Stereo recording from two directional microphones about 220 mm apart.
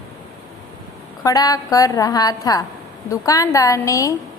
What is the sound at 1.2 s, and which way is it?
A woman's voice, 15° left (ahead or behind).